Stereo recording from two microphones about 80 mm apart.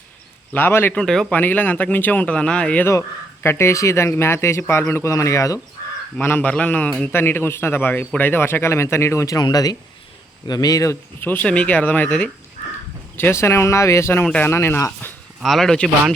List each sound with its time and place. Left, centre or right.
0.5 s speech: left
0.9 s speech: centre
1.3 s speech: left
3.4 s speech: left
6.2 s speech: left
9.4 s speech: left
11.2 s speech: left
13.1 s speech: left
15.4 s speech: centre